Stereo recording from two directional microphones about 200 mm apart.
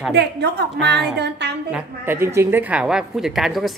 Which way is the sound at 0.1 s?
55° right (ahead or behind).